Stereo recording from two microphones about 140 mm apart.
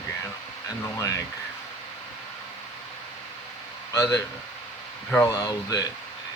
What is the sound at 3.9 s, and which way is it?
Speech, 20° left (ahead or behind).